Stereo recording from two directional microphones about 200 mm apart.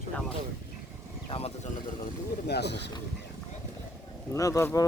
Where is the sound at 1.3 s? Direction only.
30° left (ahead or behind).